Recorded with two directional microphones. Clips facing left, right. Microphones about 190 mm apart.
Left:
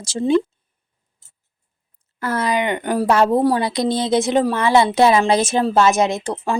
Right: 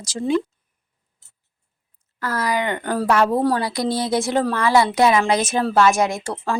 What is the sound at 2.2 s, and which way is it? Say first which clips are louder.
A woman's voice: left 3 dB; 25° left (ahead or behind).